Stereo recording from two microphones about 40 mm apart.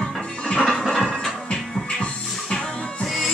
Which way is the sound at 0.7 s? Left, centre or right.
Centre.